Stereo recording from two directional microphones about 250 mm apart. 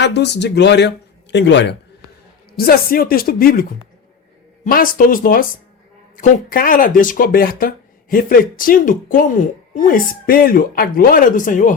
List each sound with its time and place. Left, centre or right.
0.0 s a woman's voice: left